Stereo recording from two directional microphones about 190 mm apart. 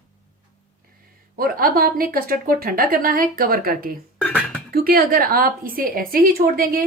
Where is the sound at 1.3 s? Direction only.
50° right (ahead or behind).